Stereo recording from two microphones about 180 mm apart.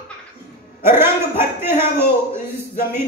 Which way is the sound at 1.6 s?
15° right (ahead or behind).